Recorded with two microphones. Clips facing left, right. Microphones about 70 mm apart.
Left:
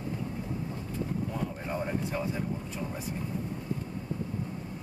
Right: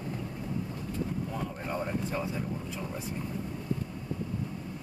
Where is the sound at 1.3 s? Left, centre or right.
Centre.